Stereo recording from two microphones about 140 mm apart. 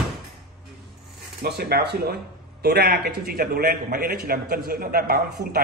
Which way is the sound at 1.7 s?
90° right.